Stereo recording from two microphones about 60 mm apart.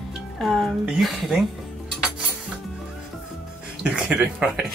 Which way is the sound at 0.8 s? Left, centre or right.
Centre.